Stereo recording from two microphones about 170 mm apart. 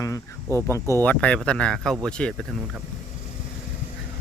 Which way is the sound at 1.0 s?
5° left (ahead or behind).